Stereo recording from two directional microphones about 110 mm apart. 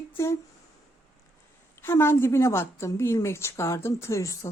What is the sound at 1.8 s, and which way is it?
A woman's voice, 20° left (ahead or behind).